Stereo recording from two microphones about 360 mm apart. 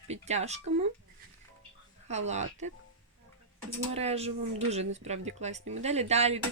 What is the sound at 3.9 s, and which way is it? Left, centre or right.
Speech, centre.